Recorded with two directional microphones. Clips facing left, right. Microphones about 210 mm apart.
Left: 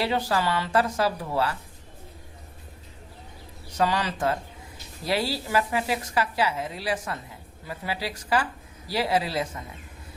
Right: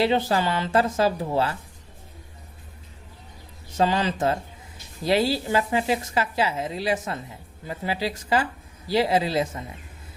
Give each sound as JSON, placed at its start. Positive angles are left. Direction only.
{"t": 0.0, "sound": "a woman's voice", "side_deg": -25}
{"t": 3.8, "sound": "a woman's voice", "side_deg": -25}